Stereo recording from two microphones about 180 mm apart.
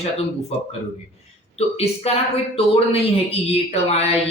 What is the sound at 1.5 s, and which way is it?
Speech, 35° left (ahead or behind).